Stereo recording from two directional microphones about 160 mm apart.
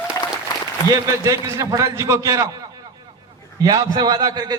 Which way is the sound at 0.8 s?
20° right (ahead or behind).